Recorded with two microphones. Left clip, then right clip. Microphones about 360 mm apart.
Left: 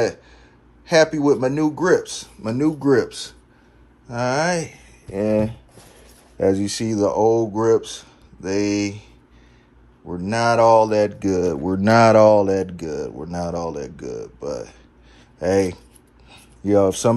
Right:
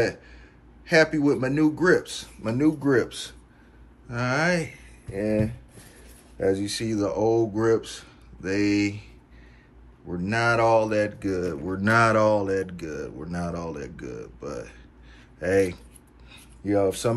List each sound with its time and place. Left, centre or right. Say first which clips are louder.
0.8 s speech: left 4 dB; centre
6.4 s speech: left 5 dB; centre
10.1 s speech: left 5 dB; centre
16.3 s a sound: left 7 dB; centre